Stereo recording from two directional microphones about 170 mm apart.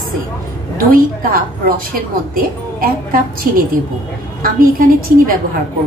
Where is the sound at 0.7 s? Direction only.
60° right (ahead or behind).